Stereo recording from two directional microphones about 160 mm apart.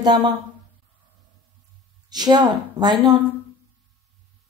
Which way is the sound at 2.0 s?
25° right (ahead or behind).